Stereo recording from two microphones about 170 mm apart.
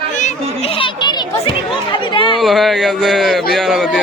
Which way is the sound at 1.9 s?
30° left (ahead or behind).